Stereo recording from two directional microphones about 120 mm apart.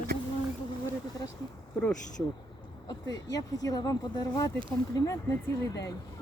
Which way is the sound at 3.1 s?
30° left (ahead or behind).